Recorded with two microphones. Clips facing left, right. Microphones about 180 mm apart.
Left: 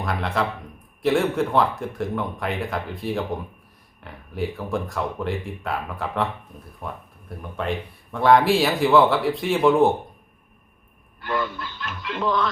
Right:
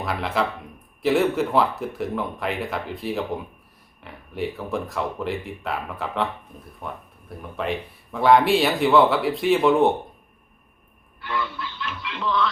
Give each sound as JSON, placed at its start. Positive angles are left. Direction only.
{"t": 0.0, "sound": "speech", "side_deg": 0}
{"t": 11.2, "sound": "music", "side_deg": 45}